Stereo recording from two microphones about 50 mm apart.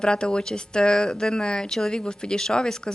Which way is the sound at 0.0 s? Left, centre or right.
Centre.